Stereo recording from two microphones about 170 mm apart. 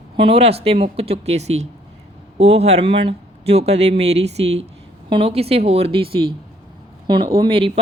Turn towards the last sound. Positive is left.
turn(degrees=-35)  # may be behind; listen again after turning